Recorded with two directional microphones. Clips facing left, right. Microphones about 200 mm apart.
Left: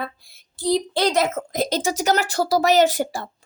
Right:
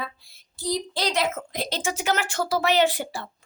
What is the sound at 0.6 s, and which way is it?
Speech, 60° left (ahead or behind).